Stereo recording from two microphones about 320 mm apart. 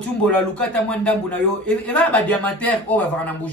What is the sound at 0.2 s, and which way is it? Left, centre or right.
A man's voice, centre.